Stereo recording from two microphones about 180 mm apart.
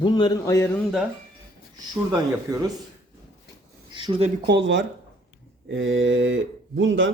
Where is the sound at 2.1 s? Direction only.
20° right (ahead or behind).